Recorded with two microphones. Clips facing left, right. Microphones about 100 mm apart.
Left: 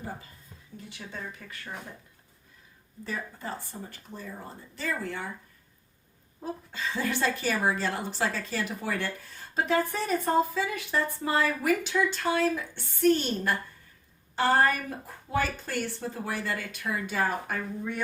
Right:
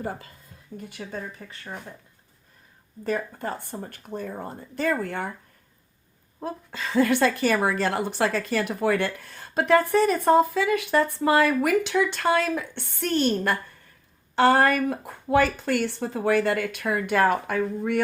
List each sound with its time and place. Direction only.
0.8 s speech: 50° right (ahead or behind)
1.4 s speech: 25° right (ahead or behind)
3.0 s speech: 55° right (ahead or behind)
6.4 s a woman's voice: 75° right (ahead or behind); by 18.0 s 90° right